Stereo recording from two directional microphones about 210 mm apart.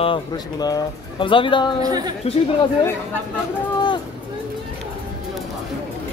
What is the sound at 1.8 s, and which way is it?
Speech, 20° right (ahead or behind).